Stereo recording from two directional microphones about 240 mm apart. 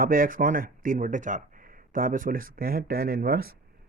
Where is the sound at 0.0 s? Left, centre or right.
Right.